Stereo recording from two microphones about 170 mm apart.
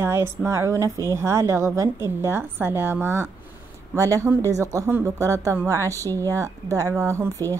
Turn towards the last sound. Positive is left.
turn(degrees=-15)  # may be behind; listen again after turning